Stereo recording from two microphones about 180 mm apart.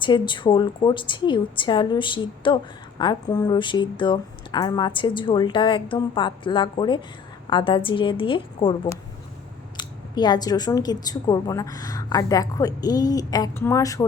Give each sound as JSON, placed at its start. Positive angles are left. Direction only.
{"t": 0.0, "sound": "a woman's voice", "side_deg": 25}